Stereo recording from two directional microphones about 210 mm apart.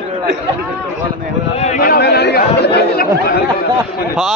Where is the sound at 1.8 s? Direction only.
50° left (ahead or behind).